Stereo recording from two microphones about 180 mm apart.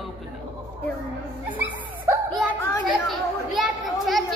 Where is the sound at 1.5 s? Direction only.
10° right (ahead or behind).